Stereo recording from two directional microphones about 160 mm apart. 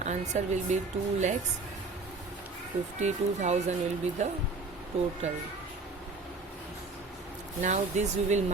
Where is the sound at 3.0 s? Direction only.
45° right (ahead or behind).